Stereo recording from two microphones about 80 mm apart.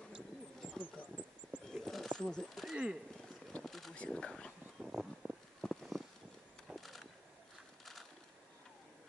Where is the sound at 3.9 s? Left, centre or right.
Centre.